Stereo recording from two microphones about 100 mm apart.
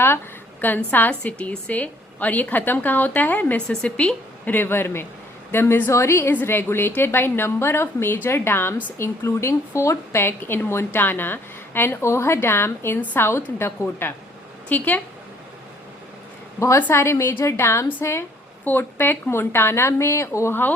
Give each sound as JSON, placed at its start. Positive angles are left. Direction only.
{"t": 0.9, "sound": "a woman's voice", "side_deg": 15}
{"t": 16.6, "sound": "speech", "side_deg": 30}